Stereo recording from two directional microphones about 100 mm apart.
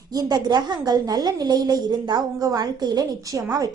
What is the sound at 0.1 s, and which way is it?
A woman's voice, 40° right (ahead or behind).